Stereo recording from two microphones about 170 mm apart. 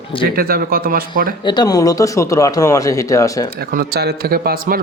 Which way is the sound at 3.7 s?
70° right (ahead or behind).